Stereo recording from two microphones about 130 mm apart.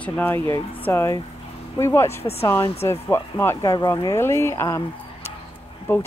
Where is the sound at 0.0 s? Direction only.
15° left (ahead or behind).